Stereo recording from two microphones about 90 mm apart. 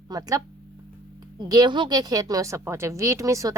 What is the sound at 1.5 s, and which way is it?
Speech, 55° right (ahead or behind).